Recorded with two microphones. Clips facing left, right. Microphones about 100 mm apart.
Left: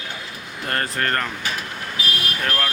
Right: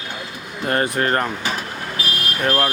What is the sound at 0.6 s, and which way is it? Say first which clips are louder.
Speech: right 5 dB; 15° right (ahead or behind).